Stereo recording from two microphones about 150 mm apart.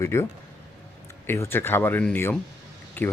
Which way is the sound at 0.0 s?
20° left (ahead or behind).